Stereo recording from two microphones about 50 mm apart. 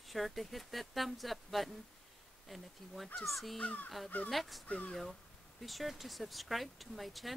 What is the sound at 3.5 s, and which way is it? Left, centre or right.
Speech, left.